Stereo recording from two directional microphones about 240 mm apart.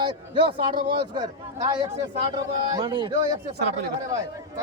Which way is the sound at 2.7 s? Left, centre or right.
Right.